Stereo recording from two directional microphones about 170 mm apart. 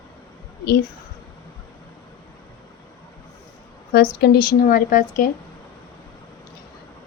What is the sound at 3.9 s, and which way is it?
Speech, 65° left (ahead or behind).